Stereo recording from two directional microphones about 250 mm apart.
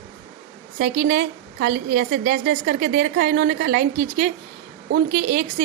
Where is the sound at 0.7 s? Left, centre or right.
Right.